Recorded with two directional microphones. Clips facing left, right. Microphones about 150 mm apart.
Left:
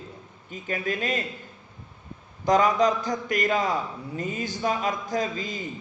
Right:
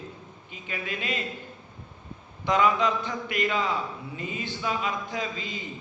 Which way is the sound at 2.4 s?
40° left (ahead or behind).